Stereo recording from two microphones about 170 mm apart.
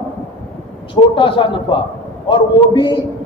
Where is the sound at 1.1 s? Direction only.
30° left (ahead or behind).